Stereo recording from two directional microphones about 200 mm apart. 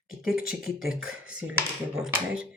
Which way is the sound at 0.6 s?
Centre (ahead or behind).